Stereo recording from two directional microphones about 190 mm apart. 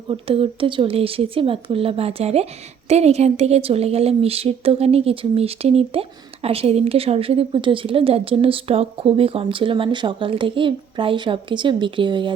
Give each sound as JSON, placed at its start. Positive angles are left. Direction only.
{"t": 0.1, "sound": "a woman's voice", "side_deg": -30}